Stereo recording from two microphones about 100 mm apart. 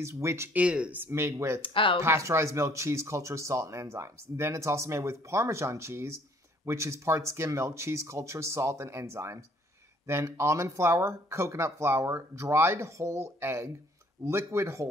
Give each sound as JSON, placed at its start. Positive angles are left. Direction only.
{"t": 0.0, "sound": "speech", "side_deg": -30}
{"t": 0.6, "sound": "speech", "side_deg": -10}
{"t": 1.6, "sound": "speech", "side_deg": 60}
{"t": 2.0, "sound": "speech", "side_deg": -30}